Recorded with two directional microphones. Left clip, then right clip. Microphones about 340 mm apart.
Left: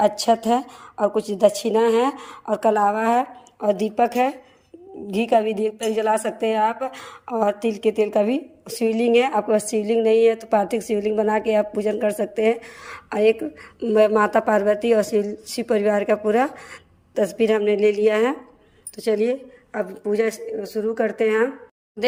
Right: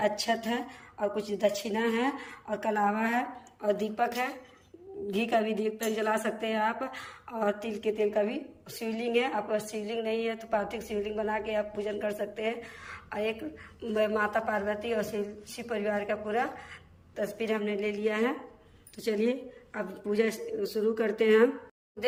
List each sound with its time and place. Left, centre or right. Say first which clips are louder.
1.1 s a woman's voice: left 11 dB; centre